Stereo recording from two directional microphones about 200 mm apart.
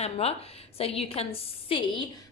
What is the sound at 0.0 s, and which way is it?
A woman's voice, 30° left (ahead or behind).